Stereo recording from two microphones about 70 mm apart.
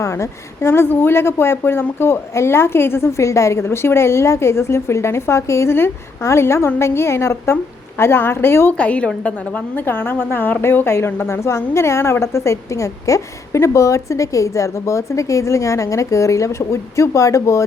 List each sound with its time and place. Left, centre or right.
0.0 s a woman's voice: left
8.8 s a woman's voice: centre; by 17.6 s left